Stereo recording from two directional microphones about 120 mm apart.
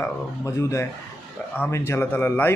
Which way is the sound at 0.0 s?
25° left (ahead or behind).